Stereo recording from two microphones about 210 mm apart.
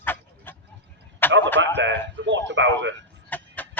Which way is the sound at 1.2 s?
10° left (ahead or behind).